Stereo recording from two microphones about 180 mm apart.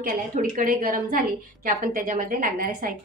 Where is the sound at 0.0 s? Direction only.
50° right (ahead or behind).